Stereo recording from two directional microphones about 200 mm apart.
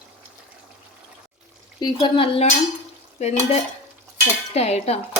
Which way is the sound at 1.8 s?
20° left (ahead or behind).